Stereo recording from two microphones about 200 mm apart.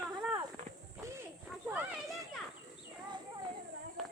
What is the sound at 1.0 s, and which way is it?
Cricket, 15° right (ahead or behind).